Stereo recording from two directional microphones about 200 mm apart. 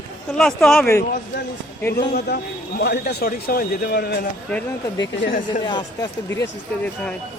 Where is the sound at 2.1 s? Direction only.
50° left (ahead or behind).